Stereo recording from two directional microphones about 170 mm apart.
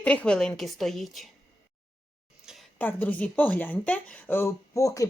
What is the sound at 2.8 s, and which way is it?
A woman's voice, 10° left (ahead or behind).